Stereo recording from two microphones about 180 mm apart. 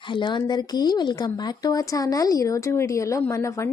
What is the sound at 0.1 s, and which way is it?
Speech, 25° left (ahead or behind).